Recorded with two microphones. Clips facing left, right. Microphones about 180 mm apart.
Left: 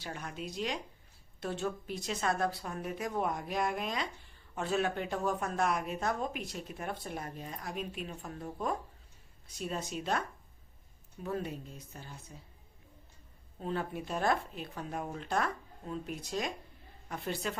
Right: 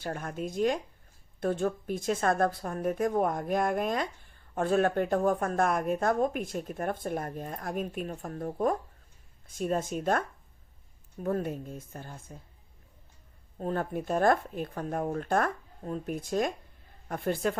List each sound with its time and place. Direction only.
0.0 s speech: 50° right (ahead or behind)
13.6 s speech: 50° right (ahead or behind)